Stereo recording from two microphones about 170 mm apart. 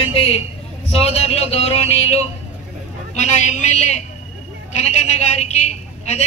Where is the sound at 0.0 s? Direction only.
35° left (ahead or behind).